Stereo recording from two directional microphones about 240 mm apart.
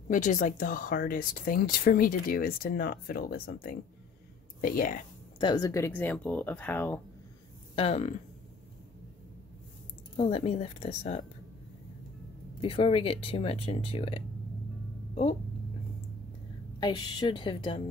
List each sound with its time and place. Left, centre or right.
0.1 s speech: left
5.4 s speech: centre
7.7 s speech: left
10.1 s speech: left
12.6 s speech: left
16.8 s speech: centre